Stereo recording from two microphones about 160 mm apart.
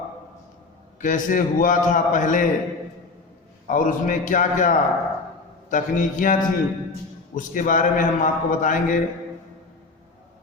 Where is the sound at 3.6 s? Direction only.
60° left (ahead or behind).